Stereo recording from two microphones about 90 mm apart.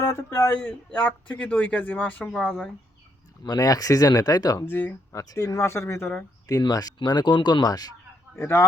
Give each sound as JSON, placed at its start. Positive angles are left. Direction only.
{"t": 0.0, "sound": "speech", "side_deg": 30}
{"t": 0.5, "sound": "a man's voice", "side_deg": 15}
{"t": 3.4, "sound": "speech", "side_deg": 45}
{"t": 4.6, "sound": "speech", "side_deg": 20}
{"t": 5.1, "sound": "speech", "side_deg": 35}
{"t": 6.5, "sound": "speech", "side_deg": 45}
{"t": 8.4, "sound": "speech", "side_deg": 30}